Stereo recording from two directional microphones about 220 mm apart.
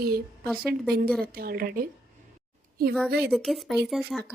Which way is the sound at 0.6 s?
45° right (ahead or behind).